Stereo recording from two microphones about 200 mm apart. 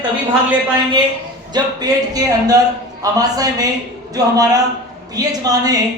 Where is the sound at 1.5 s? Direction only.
20° right (ahead or behind).